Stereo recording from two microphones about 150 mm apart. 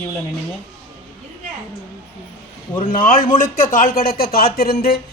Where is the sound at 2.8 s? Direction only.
70° left (ahead or behind); by 5.0 s 90° left.